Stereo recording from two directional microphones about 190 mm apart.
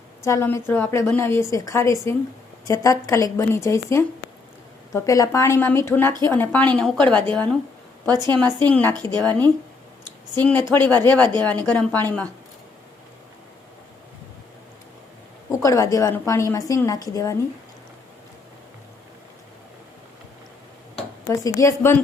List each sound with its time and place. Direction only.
0.2 s a woman's voice: 15° left (ahead or behind)
8.1 s a woman's voice: 20° right (ahead or behind)
8.5 s a woman's voice: 10° left (ahead or behind)
10.4 s a woman's voice: 10° left (ahead or behind)
15.4 s a woman's voice: 15° left (ahead or behind)
21.2 s a woman's voice: 15° left (ahead or behind)